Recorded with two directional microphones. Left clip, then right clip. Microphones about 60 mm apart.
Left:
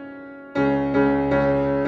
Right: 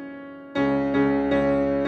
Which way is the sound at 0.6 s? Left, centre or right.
Centre.